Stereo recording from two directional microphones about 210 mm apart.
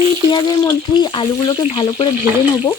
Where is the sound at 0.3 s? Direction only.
20° left (ahead or behind).